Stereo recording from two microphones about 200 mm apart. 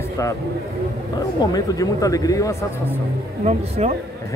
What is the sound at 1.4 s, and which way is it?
A man's voice, 20° left (ahead or behind).